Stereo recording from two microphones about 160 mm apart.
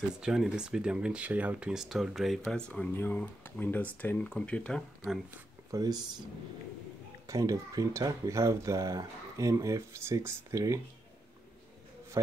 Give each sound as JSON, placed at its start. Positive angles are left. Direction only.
{"t": 0.2, "sound": "speech", "side_deg": -5}
{"t": 5.7, "sound": "speech", "side_deg": -25}
{"t": 7.2, "sound": "speech", "side_deg": -20}